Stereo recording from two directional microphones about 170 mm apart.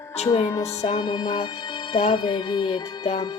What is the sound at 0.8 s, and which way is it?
Music, 30° left (ahead or behind).